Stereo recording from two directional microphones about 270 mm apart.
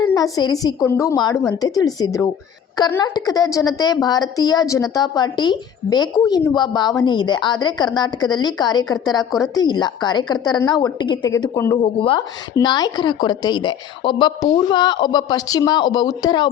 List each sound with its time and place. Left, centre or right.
0.1 s a woman's voice: centre